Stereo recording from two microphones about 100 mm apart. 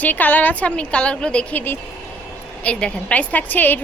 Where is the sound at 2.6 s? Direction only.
10° left (ahead or behind).